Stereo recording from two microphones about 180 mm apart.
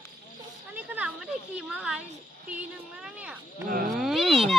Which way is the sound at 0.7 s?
10° right (ahead or behind).